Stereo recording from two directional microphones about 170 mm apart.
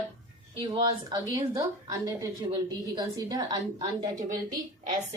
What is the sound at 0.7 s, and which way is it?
Speech, 25° right (ahead or behind).